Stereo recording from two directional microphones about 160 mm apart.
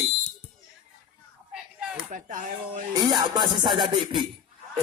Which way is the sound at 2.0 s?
55° right (ahead or behind).